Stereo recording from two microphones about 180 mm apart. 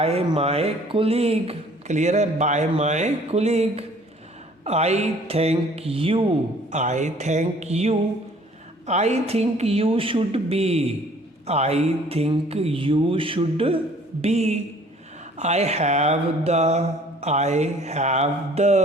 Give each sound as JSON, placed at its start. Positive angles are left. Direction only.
{"t": 0.0, "sound": "speech", "side_deg": -35}